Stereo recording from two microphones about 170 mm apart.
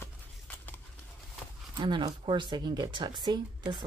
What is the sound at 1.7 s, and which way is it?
Speech, 25° right (ahead or behind).